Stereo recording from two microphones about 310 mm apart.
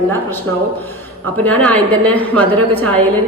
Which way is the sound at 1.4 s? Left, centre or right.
Centre.